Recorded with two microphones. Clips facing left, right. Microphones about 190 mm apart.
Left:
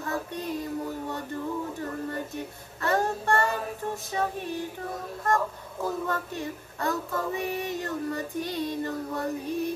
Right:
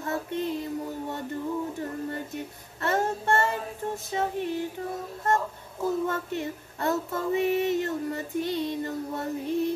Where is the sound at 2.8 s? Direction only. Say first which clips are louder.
Even; 25° right (ahead or behind).